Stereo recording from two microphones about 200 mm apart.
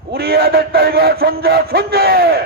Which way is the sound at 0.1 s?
50° right (ahead or behind).